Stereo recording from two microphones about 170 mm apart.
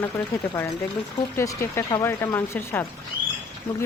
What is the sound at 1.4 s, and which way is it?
Speech, 15° left (ahead or behind).